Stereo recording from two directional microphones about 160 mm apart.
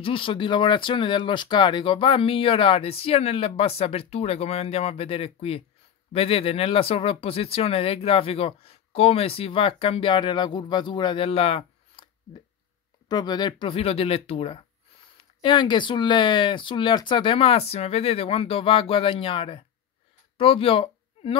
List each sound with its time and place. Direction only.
0.0 s speech: 35° left (ahead or behind)
13.1 s speech: 25° left (ahead or behind)